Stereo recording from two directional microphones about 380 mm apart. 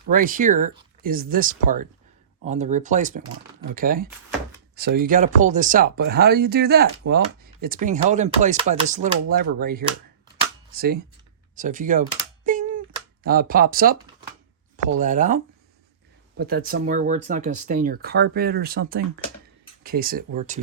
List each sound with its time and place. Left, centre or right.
0.1 s speech: right
12.5 s a sound: centre
13.2 s speech: right
14.9 s speech: centre
16.4 s speech: right